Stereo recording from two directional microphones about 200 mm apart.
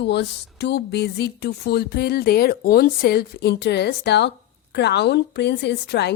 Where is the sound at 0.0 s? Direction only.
60° left (ahead or behind).